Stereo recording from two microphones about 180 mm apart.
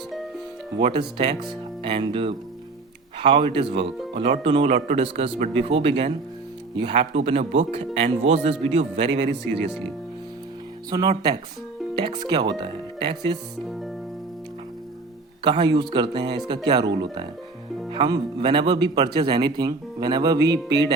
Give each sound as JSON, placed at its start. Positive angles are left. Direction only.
{"t": 0.8, "sound": "speech", "side_deg": -30}
{"t": 11.9, "sound": "speech", "side_deg": -25}
{"t": 13.7, "sound": "music", "side_deg": 0}
{"t": 15.4, "sound": "speech", "side_deg": -25}
{"t": 17.9, "sound": "speech", "side_deg": -25}